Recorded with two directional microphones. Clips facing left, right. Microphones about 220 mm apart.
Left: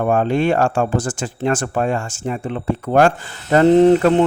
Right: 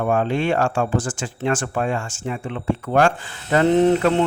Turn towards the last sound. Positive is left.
turn(degrees=40)  # may be behind; listen again after turning